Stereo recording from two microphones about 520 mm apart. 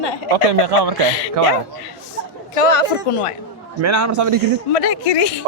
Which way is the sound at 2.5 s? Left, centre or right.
Left.